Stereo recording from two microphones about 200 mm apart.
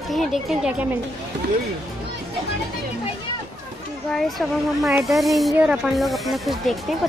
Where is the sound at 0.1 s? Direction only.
Centre (ahead or behind).